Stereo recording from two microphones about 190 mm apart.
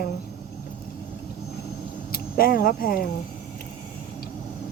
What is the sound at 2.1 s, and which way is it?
Speech, 50° left (ahead or behind).